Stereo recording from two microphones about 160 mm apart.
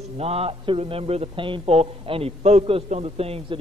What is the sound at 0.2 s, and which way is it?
A man's voice, 40° right (ahead or behind).